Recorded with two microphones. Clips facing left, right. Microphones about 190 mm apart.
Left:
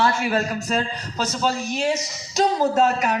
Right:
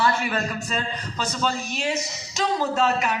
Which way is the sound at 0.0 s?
40° left (ahead or behind).